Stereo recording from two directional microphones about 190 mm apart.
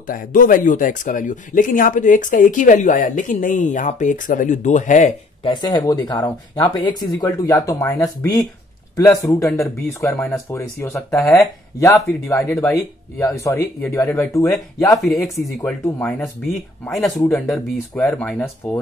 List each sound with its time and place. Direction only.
0.0 s speech: 45° left (ahead or behind)
5.4 s speech: 25° left (ahead or behind); by 18.8 s 5° left (ahead or behind)